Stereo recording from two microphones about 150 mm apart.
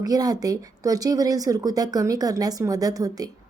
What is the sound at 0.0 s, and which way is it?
A woman's voice, 25° right (ahead or behind).